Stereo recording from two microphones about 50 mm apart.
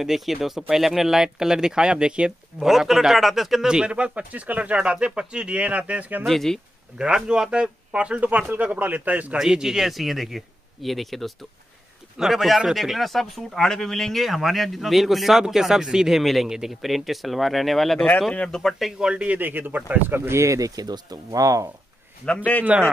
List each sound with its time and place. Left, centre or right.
0.0 s speech: centre
2.6 s speech: centre
3.6 s speech: centre
6.2 s speech: centre
7.0 s speech: centre
8.3 s speech: right
9.4 s speech: centre
16.4 s speech: centre
18.9 s speech: centre
19.2 s speech: right
20.2 s speech: right
22.4 s speech: left